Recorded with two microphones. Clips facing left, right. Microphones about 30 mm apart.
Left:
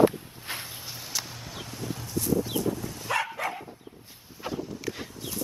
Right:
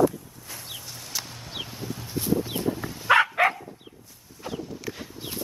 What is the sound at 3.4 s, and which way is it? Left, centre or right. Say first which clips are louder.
Dog: right 10 dB; right.